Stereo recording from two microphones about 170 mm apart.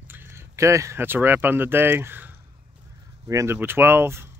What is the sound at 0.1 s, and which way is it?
Speech, 15° right (ahead or behind).